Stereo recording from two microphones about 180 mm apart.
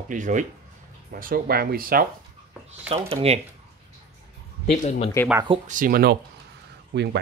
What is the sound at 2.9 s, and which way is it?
Speech, 35° right (ahead or behind).